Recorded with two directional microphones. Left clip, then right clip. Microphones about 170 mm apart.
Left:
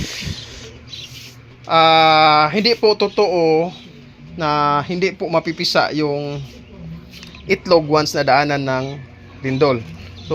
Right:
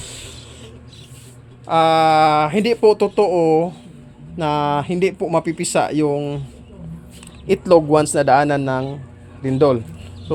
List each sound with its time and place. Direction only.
1.6 s speech: 10° right (ahead or behind)
7.4 s speech: 25° right (ahead or behind)